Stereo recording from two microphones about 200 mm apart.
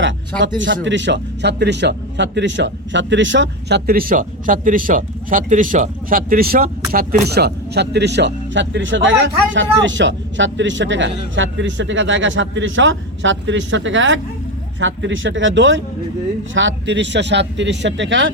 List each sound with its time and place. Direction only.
0.0 s speech: 65° right (ahead or behind)